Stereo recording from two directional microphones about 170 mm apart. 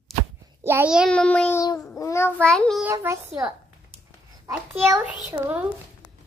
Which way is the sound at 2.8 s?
15° right (ahead or behind).